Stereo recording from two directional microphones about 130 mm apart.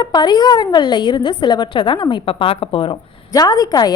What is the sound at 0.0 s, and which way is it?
A woman's voice, 30° left (ahead or behind).